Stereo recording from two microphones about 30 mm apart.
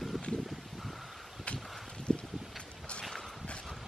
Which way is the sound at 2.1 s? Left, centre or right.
Left.